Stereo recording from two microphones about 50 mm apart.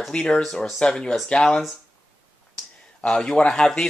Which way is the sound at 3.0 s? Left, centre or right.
Centre.